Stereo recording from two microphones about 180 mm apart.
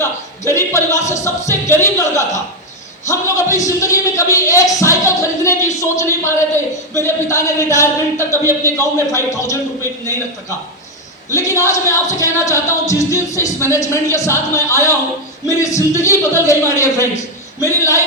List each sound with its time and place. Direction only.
0.4 s speech: 15° left (ahead or behind)
11.3 s speech: 15° left (ahead or behind)